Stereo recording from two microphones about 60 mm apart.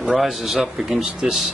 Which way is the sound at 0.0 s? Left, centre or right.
Centre.